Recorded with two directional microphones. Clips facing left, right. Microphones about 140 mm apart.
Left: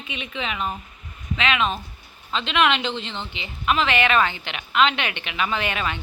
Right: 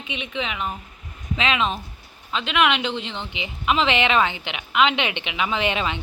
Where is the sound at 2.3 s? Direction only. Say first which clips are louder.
Even; 10° right (ahead or behind).